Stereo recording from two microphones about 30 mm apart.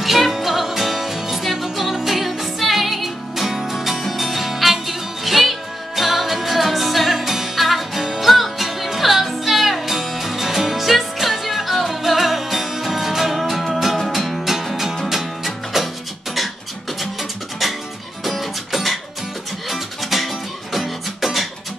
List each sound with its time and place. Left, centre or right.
0.0 s music: centre
1.9 s music: centre
2.1 s music: centre
13.4 s music: centre
17.0 s music: centre